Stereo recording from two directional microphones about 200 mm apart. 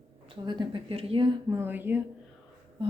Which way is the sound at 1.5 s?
10° right (ahead or behind).